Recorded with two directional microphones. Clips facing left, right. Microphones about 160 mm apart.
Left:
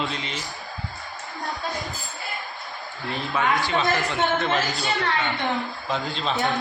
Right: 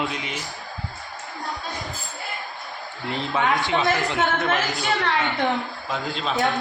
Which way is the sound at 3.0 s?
20° right (ahead or behind).